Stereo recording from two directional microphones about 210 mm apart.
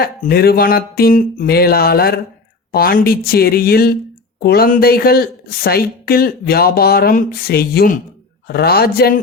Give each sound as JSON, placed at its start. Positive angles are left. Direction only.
{"t": 0.0, "sound": "a woman's voice", "side_deg": 45}